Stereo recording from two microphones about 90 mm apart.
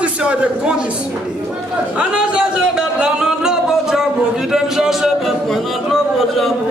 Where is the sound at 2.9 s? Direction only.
10° right (ahead or behind).